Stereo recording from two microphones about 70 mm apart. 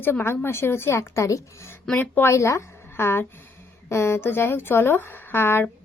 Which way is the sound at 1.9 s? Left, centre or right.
Left.